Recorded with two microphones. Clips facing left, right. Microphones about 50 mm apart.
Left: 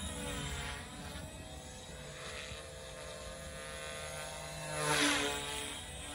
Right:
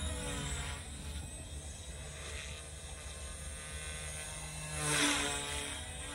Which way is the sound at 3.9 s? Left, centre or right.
Centre.